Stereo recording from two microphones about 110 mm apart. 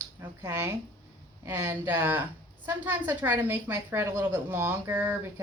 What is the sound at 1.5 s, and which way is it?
A woman's voice, 20° right (ahead or behind).